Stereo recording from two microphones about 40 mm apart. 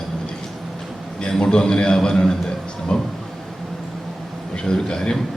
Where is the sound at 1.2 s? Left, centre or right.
Left.